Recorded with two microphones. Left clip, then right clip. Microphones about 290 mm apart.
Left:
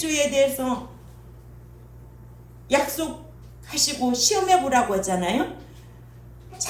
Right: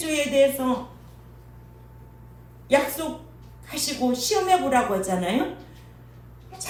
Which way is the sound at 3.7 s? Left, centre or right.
Left.